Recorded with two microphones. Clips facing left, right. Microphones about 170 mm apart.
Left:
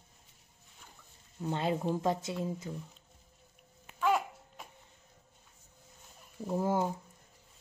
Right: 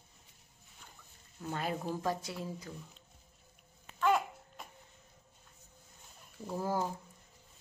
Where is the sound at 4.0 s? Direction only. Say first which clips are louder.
Even; 5° left (ahead or behind).